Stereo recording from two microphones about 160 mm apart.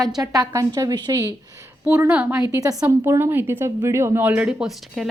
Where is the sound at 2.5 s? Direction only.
20° right (ahead or behind); by 5.1 s centre (ahead or behind).